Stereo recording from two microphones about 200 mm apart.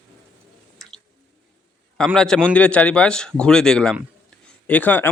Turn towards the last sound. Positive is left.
turn(degrees=10)  # may be behind; listen again after turning